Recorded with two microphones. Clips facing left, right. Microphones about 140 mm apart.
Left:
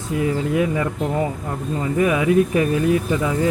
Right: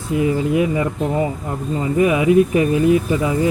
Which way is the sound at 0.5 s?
15° right (ahead or behind).